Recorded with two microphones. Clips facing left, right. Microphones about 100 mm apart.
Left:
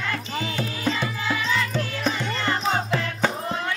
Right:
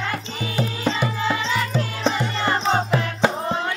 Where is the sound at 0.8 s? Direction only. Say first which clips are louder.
Right 3 dB; 20° right (ahead or behind).